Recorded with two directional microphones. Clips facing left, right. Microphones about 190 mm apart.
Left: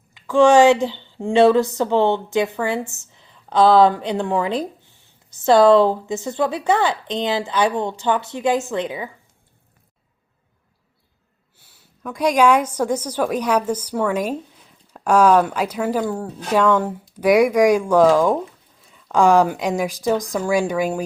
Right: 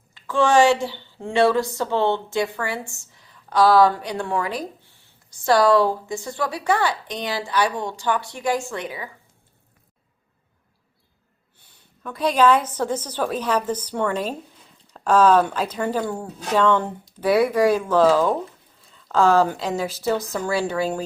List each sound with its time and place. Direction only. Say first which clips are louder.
0.1 s a woman's voice: left 6 dB; 15° left (ahead or behind)
12.0 s a woman's voice: left 2 dB; 10° left (ahead or behind)